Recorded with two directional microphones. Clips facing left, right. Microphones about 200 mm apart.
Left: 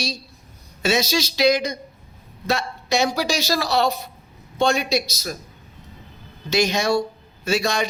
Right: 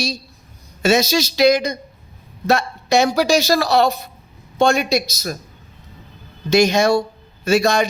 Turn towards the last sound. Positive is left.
turn(degrees=-45)  # may be behind; listen again after turning